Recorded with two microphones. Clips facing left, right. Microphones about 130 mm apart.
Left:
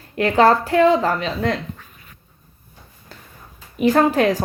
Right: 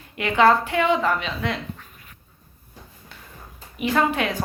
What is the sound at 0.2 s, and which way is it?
A woman's voice, 40° left (ahead or behind).